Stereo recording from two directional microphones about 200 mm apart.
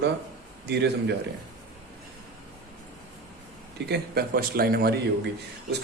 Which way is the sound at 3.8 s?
55° right (ahead or behind).